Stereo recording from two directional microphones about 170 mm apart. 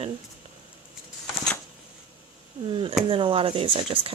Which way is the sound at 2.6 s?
30° right (ahead or behind).